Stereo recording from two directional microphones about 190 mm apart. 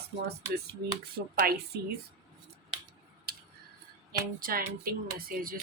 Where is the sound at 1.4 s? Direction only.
55° right (ahead or behind).